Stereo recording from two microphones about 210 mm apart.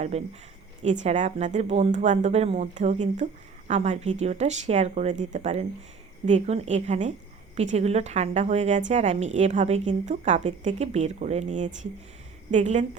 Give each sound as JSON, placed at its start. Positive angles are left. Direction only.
{"t": 0.1, "sound": "a woman's voice", "side_deg": -30}